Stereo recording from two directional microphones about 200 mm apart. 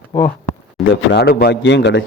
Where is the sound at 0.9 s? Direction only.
60° left (ahead or behind).